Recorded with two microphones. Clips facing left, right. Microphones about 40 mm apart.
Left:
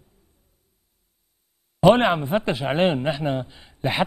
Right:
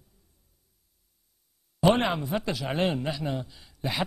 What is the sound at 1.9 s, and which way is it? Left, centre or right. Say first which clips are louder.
Speech: left 7 dB; left.